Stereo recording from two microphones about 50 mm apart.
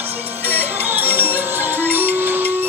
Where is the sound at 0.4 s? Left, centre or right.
Right.